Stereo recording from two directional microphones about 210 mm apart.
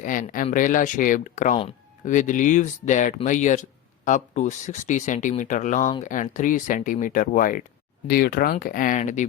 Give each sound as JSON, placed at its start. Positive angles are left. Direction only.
{"t": 0.0, "sound": "speech", "side_deg": 40}